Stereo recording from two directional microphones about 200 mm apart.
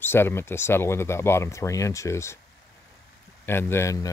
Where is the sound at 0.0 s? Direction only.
10° left (ahead or behind).